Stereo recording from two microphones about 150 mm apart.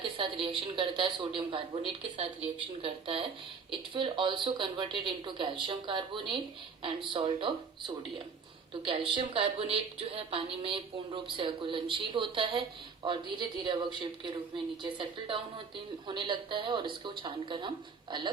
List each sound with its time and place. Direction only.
0.2 s a woman's voice: 35° right (ahead or behind)